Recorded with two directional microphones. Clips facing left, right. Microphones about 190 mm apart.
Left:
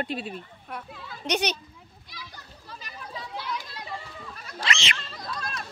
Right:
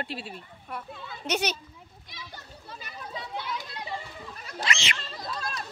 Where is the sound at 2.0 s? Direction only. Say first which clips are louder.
Right 1 dB; 25° right (ahead or behind).